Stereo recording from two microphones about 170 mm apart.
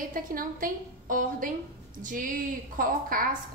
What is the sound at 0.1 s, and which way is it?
A woman's voice, 55° right (ahead or behind).